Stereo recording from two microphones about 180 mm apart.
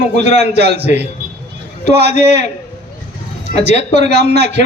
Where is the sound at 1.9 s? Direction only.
65° right (ahead or behind).